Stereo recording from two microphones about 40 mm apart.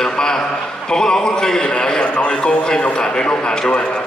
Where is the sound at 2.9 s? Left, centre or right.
Left.